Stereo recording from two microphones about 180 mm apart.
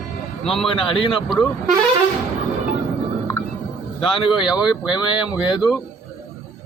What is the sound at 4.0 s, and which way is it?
Speech, 30° left (ahead or behind).